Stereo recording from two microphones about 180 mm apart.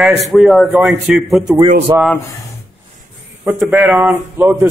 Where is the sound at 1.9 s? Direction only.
25° right (ahead or behind).